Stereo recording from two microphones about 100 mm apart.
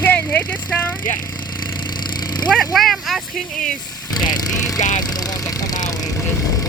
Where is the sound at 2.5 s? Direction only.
Centre (ahead or behind).